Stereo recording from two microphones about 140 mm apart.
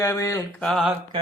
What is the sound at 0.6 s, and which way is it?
Speech, centre (ahead or behind).